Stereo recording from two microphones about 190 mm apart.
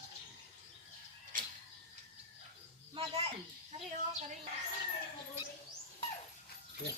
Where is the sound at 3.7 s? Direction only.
35° right (ahead or behind).